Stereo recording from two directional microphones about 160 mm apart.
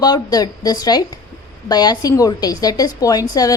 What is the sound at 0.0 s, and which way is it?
A woman's voice, 25° left (ahead or behind).